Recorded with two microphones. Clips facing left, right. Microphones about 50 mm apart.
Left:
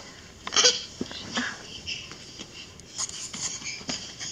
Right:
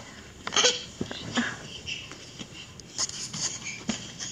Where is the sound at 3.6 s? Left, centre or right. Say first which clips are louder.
Right 3 dB; centre.